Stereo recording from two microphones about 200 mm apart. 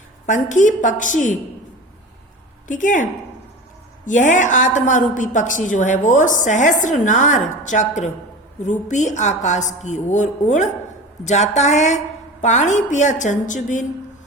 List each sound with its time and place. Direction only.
0.3 s a woman's voice: 40° left (ahead or behind)
2.6 s a woman's voice: 40° left (ahead or behind)